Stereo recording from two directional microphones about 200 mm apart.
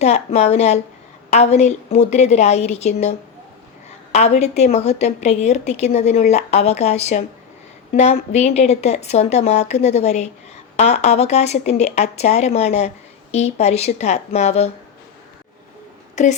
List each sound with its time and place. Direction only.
0.0 s a woman's voice: 30° left (ahead or behind)
16.2 s a woman's voice: 35° left (ahead or behind)